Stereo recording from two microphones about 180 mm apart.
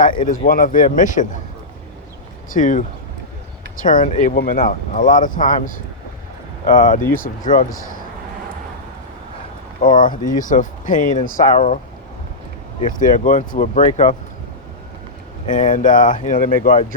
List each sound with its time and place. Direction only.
0.0 s speech: 50° left (ahead or behind)
2.5 s speech: 45° left (ahead or behind)
9.8 s speech: 50° left (ahead or behind)
12.8 s speech: 45° left (ahead or behind)
15.4 s speech: 45° left (ahead or behind)